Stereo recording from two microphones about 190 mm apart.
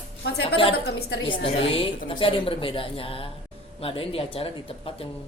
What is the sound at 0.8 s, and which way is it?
Speech, 60° left (ahead or behind).